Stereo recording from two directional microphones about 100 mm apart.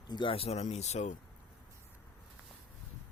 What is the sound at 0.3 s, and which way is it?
Speech, 90° left.